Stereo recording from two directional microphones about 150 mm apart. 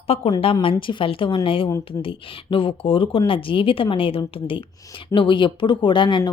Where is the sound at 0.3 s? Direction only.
30° left (ahead or behind).